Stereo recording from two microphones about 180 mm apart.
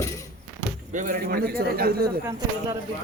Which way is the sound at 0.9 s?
45° right (ahead or behind).